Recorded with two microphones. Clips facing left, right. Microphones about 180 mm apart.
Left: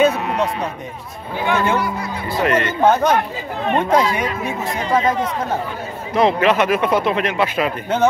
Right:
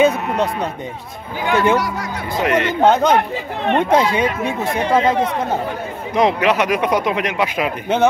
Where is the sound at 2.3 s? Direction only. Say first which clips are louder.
Right 1 dB; 15° right (ahead or behind).